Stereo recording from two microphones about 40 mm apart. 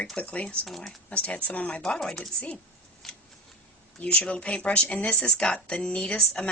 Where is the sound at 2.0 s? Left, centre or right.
Centre.